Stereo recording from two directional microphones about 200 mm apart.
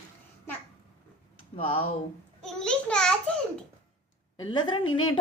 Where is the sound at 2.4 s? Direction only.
5° left (ahead or behind).